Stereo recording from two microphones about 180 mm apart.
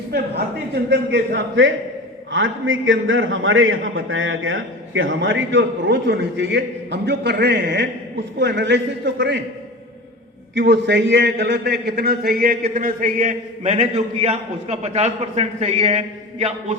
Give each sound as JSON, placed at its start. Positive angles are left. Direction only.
{"t": 0.9, "sound": "a man's voice", "side_deg": -75}
{"t": 10.5, "sound": "a man's voice", "side_deg": -75}